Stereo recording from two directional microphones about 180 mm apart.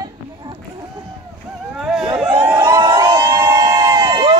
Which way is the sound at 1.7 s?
Centre (ahead or behind).